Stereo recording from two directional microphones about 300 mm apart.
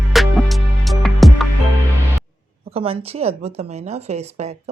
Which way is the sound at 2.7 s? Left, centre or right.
Centre.